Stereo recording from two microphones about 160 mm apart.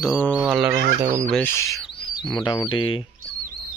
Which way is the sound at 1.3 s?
5° left (ahead or behind).